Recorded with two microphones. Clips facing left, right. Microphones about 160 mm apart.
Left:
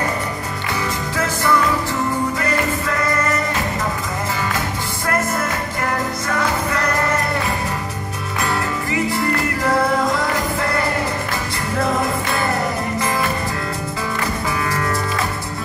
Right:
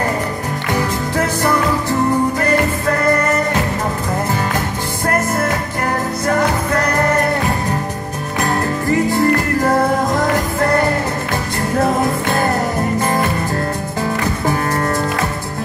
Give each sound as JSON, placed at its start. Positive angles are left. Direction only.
{"t": 0.7, "sound": "music", "side_deg": -45}
{"t": 6.2, "sound": "music", "side_deg": -45}
{"t": 8.4, "sound": "music", "side_deg": -40}
{"t": 14.4, "sound": "music", "side_deg": -45}